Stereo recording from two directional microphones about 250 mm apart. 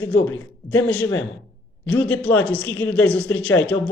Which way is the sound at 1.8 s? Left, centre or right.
Centre.